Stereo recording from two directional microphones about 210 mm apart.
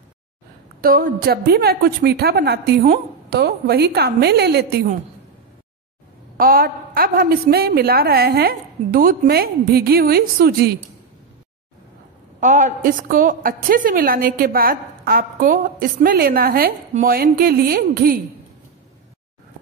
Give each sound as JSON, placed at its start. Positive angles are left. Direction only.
{"t": 0.8, "sound": "a woman's voice", "side_deg": -45}
{"t": 6.3, "sound": "a woman's voice", "side_deg": -45}
{"t": 12.4, "sound": "a woman's voice", "side_deg": -35}